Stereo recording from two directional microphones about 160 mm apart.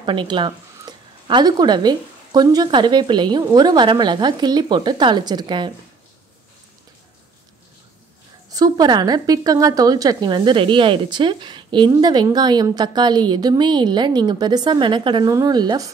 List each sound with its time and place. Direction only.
0.0 s a woman's voice: 30° right (ahead or behind)
8.5 s a woman's voice: 20° right (ahead or behind)